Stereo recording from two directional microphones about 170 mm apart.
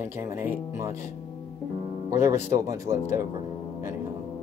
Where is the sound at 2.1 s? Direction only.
15° right (ahead or behind).